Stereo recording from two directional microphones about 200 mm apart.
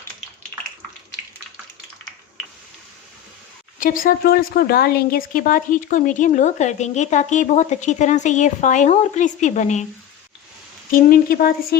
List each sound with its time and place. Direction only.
3.8 s a woman's voice: 45° left (ahead or behind)
10.9 s speech: 45° left (ahead or behind)